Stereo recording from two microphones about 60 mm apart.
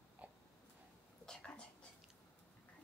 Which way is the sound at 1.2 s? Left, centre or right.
Centre.